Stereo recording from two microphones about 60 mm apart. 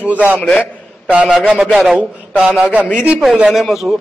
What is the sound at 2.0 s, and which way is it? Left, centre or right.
Speech, right.